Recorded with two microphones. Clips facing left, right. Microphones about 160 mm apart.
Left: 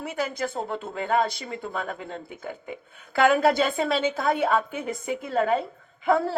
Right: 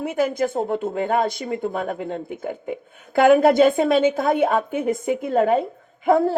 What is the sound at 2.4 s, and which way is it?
Speech, 50° right (ahead or behind).